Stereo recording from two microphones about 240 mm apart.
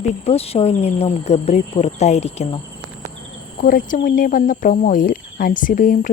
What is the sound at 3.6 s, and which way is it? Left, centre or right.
Speech, left.